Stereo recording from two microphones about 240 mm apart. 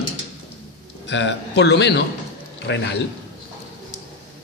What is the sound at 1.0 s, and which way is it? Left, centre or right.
Speech, left.